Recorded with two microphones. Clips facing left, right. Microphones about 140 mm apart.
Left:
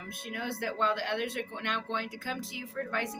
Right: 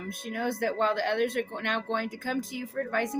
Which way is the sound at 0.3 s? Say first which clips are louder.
Right 6 dB; 45° right (ahead or behind).